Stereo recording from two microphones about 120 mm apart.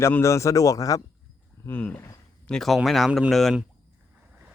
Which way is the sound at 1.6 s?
15° left (ahead or behind).